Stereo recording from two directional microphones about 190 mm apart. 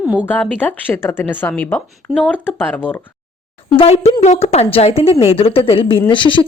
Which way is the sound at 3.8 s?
30° left (ahead or behind).